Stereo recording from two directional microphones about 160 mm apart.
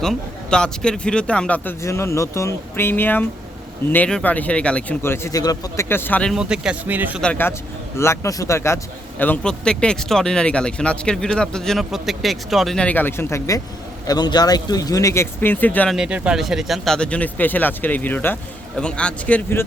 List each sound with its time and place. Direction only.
0.0 s speech: 5° left (ahead or behind)
6.3 s speech: 5° right (ahead or behind)
7.2 s a man's voice: 10° left (ahead or behind)
14.1 s speech: 25° left (ahead or behind); by 16.0 s 10° left (ahead or behind)
16.0 s speech: 5° right (ahead or behind); by 19.6 s 10° left (ahead or behind)